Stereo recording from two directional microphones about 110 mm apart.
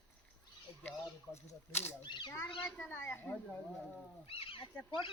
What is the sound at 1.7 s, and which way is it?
Speech, 20° left (ahead or behind).